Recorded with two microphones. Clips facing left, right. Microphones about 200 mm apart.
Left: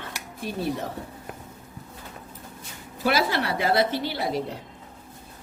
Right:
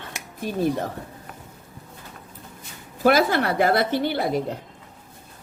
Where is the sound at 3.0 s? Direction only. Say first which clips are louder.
Right 5 dB; 50° right (ahead or behind).